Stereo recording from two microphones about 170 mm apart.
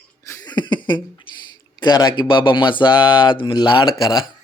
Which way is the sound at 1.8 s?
25° left (ahead or behind).